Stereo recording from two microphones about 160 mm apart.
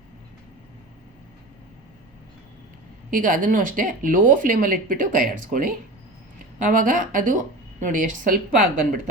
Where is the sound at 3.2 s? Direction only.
60° right (ahead or behind).